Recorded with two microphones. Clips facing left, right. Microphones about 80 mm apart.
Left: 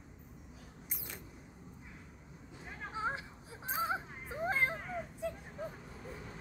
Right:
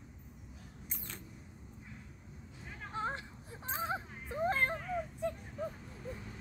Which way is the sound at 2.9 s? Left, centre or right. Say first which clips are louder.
Even; centre.